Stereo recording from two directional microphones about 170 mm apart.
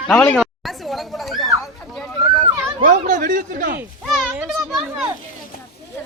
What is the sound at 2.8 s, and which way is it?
Speech, 50° right (ahead or behind).